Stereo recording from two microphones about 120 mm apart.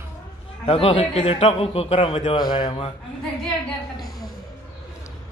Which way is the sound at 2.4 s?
40° left (ahead or behind).